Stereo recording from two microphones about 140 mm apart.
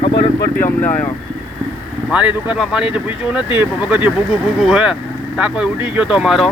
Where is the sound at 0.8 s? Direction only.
15° left (ahead or behind).